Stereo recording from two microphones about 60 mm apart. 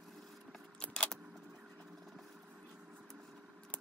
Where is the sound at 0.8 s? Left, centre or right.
Centre.